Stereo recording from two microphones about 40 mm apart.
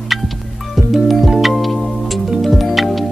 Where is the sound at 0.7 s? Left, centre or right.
Centre.